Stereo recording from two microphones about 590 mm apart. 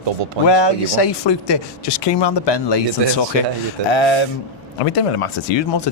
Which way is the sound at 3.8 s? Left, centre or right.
Left.